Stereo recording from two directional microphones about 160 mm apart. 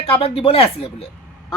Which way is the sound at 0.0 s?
40° left (ahead or behind).